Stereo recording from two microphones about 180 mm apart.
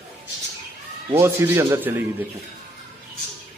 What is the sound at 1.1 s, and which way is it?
A man's voice, 15° right (ahead or behind).